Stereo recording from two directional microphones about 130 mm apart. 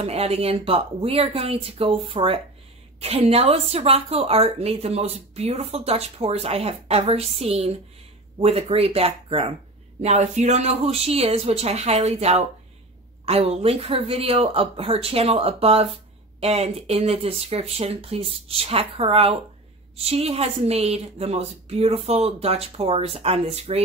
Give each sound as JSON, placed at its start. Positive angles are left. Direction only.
{"t": 0.0, "sound": "speech", "side_deg": -50}
{"t": 10.0, "sound": "speech", "side_deg": -60}